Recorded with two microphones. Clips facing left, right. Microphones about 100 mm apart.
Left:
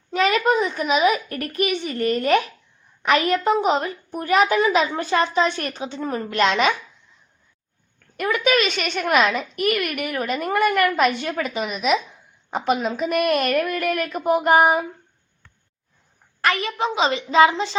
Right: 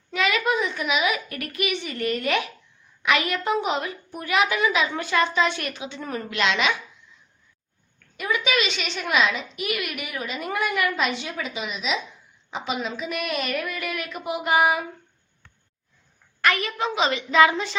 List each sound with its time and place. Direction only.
0.1 s a woman's voice: 40° left (ahead or behind)
8.1 s a woman's voice: 50° left (ahead or behind)
16.4 s a woman's voice: 30° left (ahead or behind)